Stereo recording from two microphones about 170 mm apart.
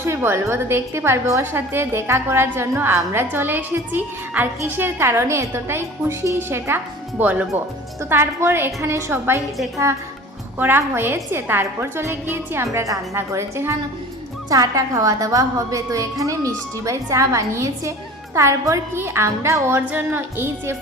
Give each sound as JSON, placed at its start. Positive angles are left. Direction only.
{"t": 0.0, "sound": "a woman's voice", "side_deg": -15}
{"t": 10.6, "sound": "a woman's voice", "side_deg": -10}